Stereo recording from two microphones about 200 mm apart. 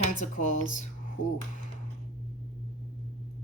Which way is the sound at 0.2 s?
40° left (ahead or behind).